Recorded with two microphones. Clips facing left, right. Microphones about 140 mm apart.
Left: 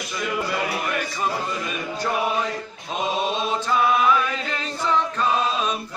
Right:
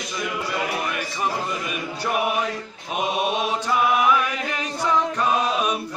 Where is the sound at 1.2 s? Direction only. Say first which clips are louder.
Right 3 dB; 15° right (ahead or behind).